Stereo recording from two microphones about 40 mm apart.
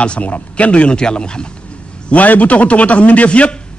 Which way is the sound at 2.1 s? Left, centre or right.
Left.